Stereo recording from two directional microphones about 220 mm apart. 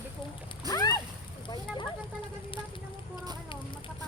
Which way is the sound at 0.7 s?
15° left (ahead or behind).